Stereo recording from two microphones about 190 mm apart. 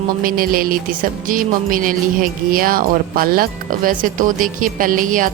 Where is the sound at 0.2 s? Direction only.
50° right (ahead or behind).